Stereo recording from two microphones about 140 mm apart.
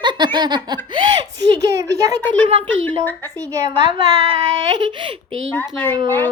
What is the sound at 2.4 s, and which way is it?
Speech, 40° right (ahead or behind).